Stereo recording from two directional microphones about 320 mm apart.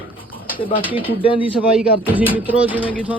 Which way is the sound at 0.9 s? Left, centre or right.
Centre.